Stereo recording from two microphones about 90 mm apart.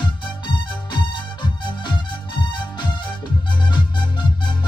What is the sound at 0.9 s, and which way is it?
Music, 60° left (ahead or behind).